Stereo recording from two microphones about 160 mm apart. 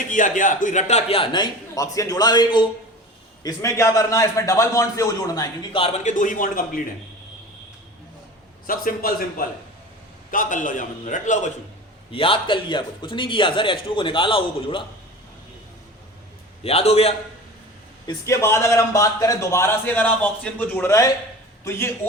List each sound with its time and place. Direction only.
0.1 s a man's voice: 55° left (ahead or behind); by 5.8 s 20° left (ahead or behind)
5.8 s a man's voice: 45° left (ahead or behind)
8.6 s a man's voice: 60° left (ahead or behind)
12.1 s a man's voice: 35° left (ahead or behind)
16.6 s a man's voice: 40° left (ahead or behind)
18.0 s a man's voice: 20° left (ahead or behind)